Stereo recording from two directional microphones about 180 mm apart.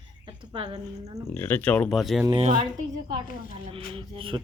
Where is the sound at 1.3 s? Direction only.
10° left (ahead or behind).